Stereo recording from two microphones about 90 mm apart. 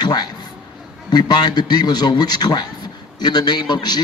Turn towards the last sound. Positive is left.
turn(degrees=50)  # may be behind; listen again after turning